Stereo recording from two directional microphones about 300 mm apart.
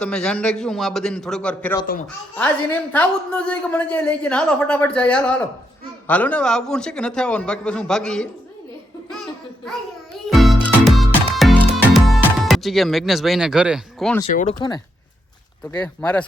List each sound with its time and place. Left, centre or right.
0.0 s a woman's voice: centre
10.2 s music: centre
11.9 s speech: centre
14.3 s speech: centre
15.8 s a woman's voice: centre